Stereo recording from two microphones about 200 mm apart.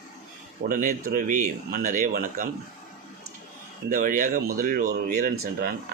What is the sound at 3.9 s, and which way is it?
Speech, 40° right (ahead or behind).